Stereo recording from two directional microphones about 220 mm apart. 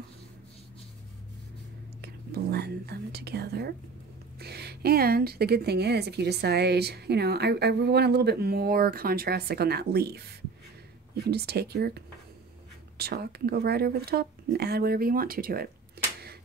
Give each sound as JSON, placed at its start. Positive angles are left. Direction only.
{"t": 2.0, "sound": "whispering", "side_deg": -45}
{"t": 4.4, "sound": "a woman's voice", "side_deg": -45}
{"t": 11.2, "sound": "a woman's voice", "side_deg": -45}
{"t": 16.0, "sound": "a sound", "side_deg": -45}